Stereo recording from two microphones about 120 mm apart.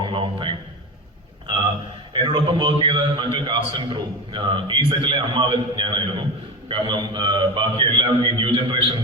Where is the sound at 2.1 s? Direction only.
45° right (ahead or behind).